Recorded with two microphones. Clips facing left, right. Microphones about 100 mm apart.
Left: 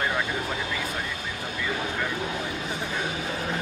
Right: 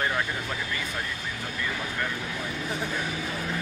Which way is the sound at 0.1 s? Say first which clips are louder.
Left 2 dB; 20° left (ahead or behind).